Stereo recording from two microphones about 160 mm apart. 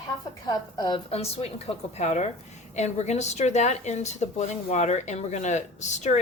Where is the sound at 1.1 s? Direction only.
40° left (ahead or behind).